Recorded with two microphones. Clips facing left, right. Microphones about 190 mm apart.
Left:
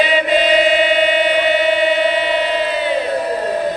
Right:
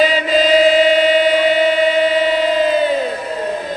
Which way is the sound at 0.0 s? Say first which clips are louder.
Right 1 dB; 40° right (ahead or behind).